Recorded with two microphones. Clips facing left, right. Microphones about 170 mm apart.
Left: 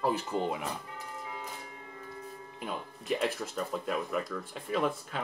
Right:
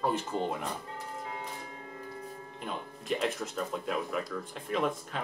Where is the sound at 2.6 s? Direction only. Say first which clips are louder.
Left 1 dB; centre (ahead or behind).